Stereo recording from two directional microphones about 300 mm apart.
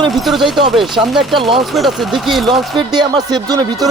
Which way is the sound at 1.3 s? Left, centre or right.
Centre.